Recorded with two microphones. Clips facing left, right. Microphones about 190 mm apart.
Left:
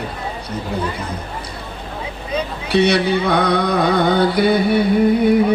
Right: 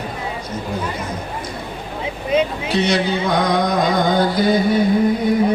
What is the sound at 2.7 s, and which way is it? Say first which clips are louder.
Music: left 3 dB; 60° left (ahead or behind).